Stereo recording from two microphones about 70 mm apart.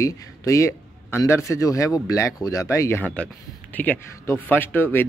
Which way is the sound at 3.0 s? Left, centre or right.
Centre.